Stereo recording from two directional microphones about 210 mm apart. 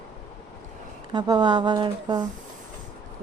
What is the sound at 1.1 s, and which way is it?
A woman's voice, 20° right (ahead or behind).